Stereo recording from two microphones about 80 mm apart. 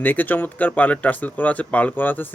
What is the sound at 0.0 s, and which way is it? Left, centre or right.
Speech, left.